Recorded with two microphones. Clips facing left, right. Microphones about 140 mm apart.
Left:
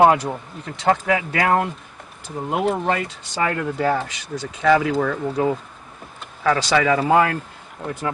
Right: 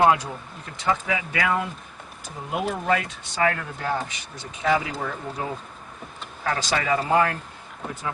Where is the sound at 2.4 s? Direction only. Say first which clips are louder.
Left 6 dB; 60° left (ahead or behind).